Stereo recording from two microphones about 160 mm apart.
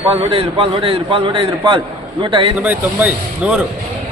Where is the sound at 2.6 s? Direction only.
10° right (ahead or behind).